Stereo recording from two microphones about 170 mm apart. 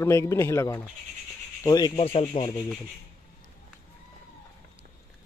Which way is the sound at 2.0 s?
35° left (ahead or behind).